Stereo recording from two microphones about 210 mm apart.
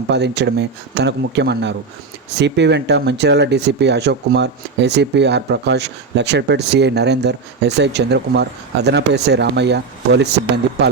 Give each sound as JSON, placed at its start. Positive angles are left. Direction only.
{"t": 0.1, "sound": "speech", "side_deg": -55}